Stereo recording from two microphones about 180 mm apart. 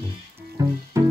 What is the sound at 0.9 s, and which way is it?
Music, 15° right (ahead or behind).